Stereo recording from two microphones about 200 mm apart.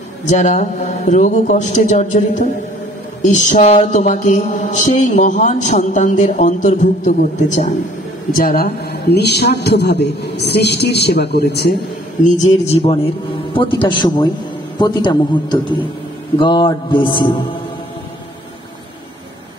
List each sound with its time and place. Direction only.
0.3 s mantra: 40° left (ahead or behind)
8.3 s a man's voice: 45° left (ahead or behind)
12.6 s a man's voice: 30° left (ahead or behind)